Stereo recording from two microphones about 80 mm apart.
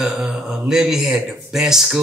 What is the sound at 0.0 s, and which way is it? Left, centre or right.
A man's voice, centre.